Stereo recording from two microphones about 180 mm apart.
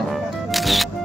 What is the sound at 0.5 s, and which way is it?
Music, centre (ahead or behind).